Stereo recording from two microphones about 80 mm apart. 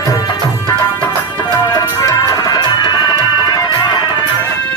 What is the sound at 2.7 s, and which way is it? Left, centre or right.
Music, left.